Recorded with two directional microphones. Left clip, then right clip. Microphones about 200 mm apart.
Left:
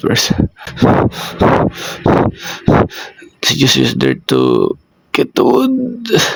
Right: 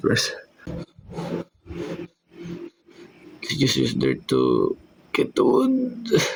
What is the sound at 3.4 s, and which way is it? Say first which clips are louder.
Speech: left 11 dB; 40° left (ahead or behind).